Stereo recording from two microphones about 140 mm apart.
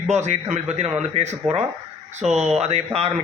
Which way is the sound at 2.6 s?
50° right (ahead or behind).